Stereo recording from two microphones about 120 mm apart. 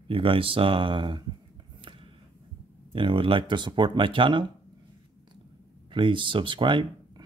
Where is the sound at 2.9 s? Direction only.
45° right (ahead or behind).